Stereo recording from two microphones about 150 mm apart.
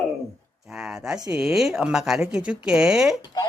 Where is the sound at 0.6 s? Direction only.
Centre (ahead or behind).